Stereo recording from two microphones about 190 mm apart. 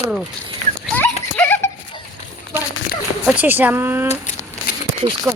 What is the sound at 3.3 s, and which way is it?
Speech, 10° right (ahead or behind).